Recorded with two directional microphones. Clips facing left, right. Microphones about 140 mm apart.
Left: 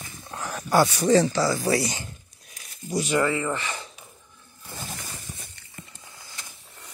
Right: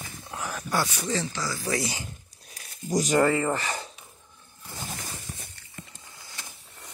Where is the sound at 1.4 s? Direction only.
60° left (ahead or behind).